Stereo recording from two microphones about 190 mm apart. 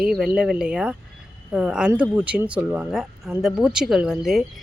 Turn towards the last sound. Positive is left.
turn(degrees=0)  # may be behind; listen again after turning